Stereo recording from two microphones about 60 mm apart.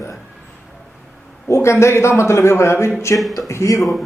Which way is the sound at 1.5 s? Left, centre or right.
Left.